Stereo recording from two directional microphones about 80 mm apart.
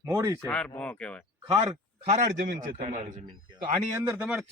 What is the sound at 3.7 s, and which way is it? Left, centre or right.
Speech, right.